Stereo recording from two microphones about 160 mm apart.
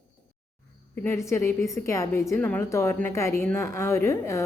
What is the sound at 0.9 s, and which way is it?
A woman's voice, 15° left (ahead or behind).